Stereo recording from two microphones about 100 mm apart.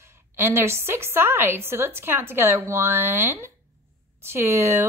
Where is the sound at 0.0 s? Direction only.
25° right (ahead or behind).